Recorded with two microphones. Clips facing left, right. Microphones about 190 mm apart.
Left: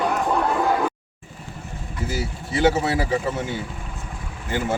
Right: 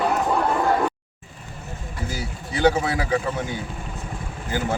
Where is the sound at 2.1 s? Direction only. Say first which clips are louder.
Left 4 dB; 5° left (ahead or behind).